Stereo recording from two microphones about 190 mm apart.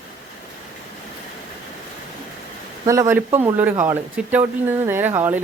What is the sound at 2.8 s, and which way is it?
Speech, 15° right (ahead or behind).